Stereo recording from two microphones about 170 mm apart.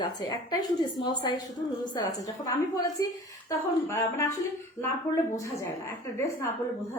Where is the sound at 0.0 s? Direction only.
25° left (ahead or behind).